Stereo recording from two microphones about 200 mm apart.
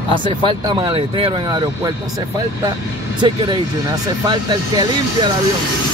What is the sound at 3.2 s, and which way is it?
Speech, 25° right (ahead or behind).